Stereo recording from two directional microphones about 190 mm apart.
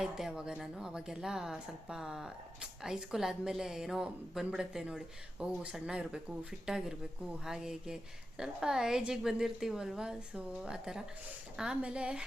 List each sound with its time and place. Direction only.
0.0 s speech: 5° right (ahead or behind)